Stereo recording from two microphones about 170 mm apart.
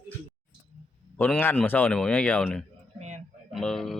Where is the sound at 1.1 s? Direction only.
10° left (ahead or behind).